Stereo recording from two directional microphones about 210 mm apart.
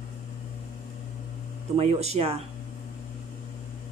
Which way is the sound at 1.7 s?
30° right (ahead or behind).